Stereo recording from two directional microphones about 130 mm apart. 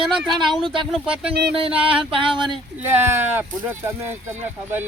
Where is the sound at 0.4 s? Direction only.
40° right (ahead or behind).